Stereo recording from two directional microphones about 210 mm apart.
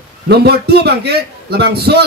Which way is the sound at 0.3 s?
50° right (ahead or behind).